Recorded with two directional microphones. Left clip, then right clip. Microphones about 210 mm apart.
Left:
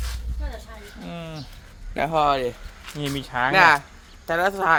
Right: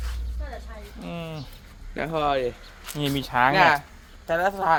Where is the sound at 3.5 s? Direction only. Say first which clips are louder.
Left 8 dB; 20° left (ahead or behind).